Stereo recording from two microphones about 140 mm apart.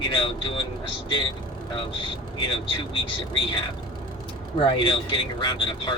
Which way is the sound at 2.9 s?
35° left (ahead or behind).